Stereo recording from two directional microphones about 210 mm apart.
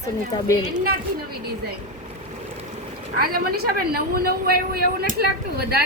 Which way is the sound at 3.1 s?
45° right (ahead or behind).